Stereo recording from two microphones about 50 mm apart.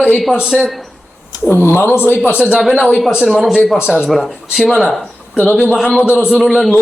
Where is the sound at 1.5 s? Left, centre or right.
Left.